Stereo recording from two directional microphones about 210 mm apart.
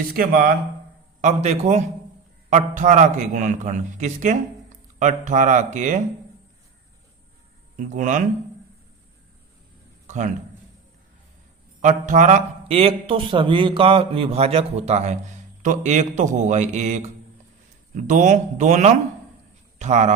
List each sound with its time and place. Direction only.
0.0 s speech: 45° right (ahead or behind)
1.2 s a man's voice: 30° right (ahead or behind)
7.8 s a man's voice: 35° right (ahead or behind)
10.1 s a man's voice: 35° right (ahead or behind)
11.8 s a man's voice: 35° right (ahead or behind)